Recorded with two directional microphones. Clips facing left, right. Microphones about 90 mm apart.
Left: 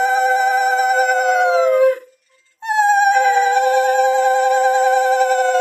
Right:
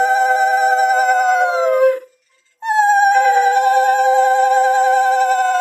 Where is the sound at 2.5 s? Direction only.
40° right (ahead or behind).